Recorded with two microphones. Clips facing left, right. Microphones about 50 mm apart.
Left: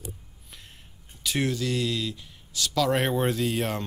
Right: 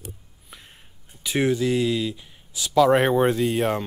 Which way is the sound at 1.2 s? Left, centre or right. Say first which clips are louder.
Right 6 dB; centre.